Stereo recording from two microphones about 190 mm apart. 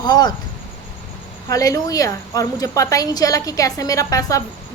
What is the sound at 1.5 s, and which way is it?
A woman's voice, 15° left (ahead or behind).